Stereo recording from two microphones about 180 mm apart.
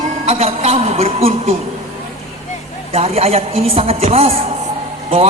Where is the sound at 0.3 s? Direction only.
35° right (ahead or behind).